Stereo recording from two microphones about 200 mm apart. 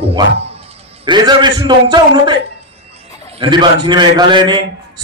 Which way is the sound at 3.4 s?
25° right (ahead or behind).